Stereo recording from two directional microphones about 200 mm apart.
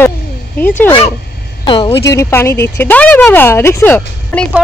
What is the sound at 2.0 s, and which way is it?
A woman's voice, 15° left (ahead or behind).